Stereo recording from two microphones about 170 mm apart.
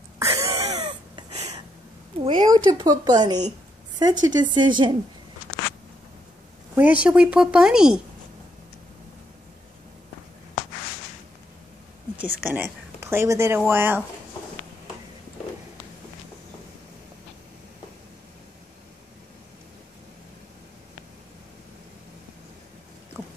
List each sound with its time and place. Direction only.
0.2 s wheeze: 20° right (ahead or behind)
1.3 s a sound: 40° right (ahead or behind)
2.2 s speech: 25° right (ahead or behind)
6.7 s a woman's voice: 10° right (ahead or behind)
12.4 s speech: 15° right (ahead or behind)